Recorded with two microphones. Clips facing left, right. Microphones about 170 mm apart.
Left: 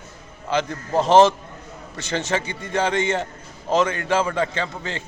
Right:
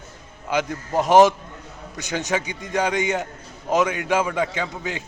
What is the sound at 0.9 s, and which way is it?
Speech, 15° right (ahead or behind).